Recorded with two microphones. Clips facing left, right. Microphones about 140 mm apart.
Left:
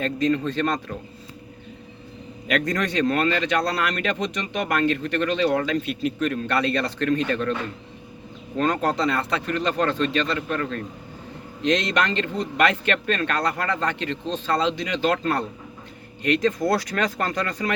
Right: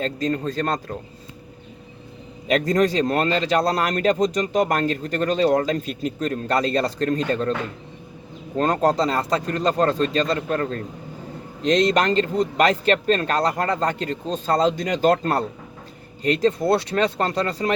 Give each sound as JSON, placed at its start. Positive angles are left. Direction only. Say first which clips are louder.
{"t": 0.0, "sound": "speech", "louder": "left 1 dB", "side_deg": -35}
{"t": 2.5, "sound": "speech", "louder": "right 5 dB", "side_deg": -35}
{"t": 8.5, "sound": "speech", "louder": "right 3 dB", "side_deg": -40}